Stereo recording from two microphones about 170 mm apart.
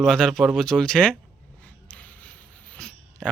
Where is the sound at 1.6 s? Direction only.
10° left (ahead or behind).